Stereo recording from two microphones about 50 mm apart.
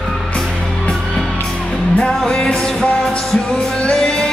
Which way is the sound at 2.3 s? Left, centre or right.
Centre.